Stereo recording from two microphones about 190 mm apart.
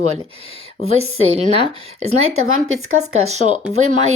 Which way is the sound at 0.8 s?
90° right.